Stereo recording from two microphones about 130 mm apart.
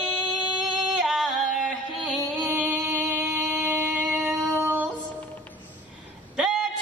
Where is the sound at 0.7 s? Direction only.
Centre (ahead or behind).